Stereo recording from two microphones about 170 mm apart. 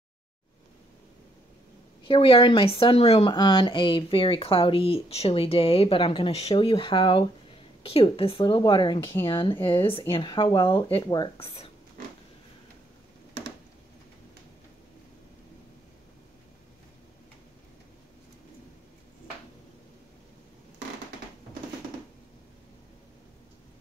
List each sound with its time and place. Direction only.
2.0 s speech: 30° left (ahead or behind)